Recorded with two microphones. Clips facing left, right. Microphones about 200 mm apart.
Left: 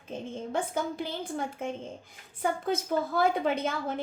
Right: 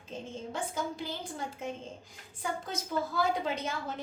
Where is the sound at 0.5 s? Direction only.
55° left (ahead or behind).